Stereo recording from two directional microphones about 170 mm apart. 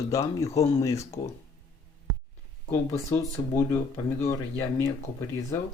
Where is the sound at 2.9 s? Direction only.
15° left (ahead or behind).